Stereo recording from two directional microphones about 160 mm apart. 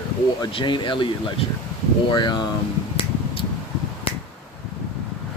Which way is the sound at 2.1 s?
30° left (ahead or behind).